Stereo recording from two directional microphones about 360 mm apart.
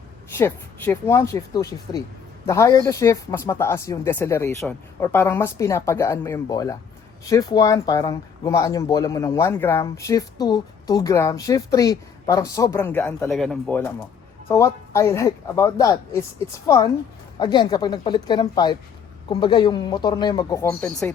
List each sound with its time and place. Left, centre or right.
0.3 s speech: centre